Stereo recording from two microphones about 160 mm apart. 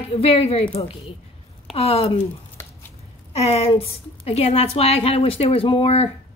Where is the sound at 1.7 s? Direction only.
35° left (ahead or behind).